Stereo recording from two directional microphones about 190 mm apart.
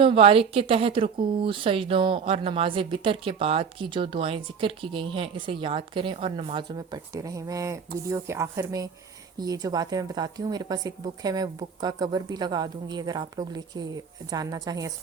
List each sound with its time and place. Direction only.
0.0 s speech: 30° right (ahead or behind)